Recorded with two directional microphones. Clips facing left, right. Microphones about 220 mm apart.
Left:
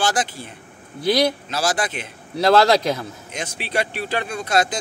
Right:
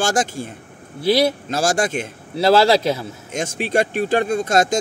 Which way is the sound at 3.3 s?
45° right (ahead or behind).